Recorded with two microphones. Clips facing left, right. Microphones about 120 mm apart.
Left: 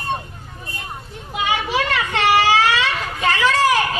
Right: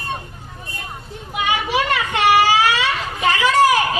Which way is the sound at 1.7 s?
10° right (ahead or behind).